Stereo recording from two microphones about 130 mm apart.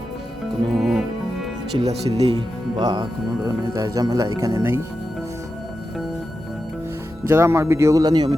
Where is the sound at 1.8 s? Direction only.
50° right (ahead or behind).